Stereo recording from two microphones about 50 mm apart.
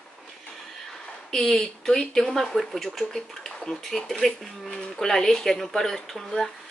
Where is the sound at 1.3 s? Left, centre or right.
Centre.